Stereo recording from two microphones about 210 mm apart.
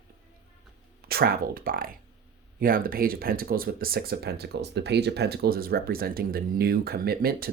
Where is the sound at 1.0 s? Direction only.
45° right (ahead or behind).